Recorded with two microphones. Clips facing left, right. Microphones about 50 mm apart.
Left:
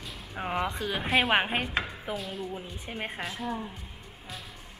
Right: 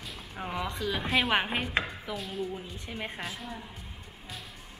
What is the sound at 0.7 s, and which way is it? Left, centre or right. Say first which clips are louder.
Speech: even; left.